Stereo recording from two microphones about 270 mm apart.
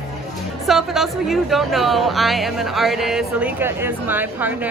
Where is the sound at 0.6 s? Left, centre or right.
Centre.